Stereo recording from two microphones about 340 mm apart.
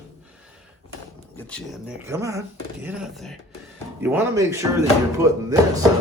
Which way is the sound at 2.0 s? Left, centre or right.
Centre.